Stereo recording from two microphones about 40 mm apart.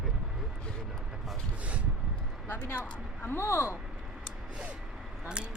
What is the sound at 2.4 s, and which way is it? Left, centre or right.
Speech, left.